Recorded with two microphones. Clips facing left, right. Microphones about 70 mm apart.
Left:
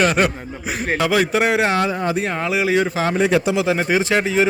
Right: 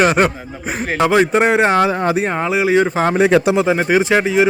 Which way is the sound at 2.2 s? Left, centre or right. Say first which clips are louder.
Right 3 dB; centre.